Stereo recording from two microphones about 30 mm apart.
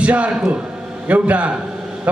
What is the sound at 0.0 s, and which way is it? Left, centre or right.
A man's voice, right.